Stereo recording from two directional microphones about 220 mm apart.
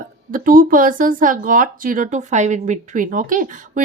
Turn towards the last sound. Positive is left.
turn(degrees=-35)  # may be behind; listen again after turning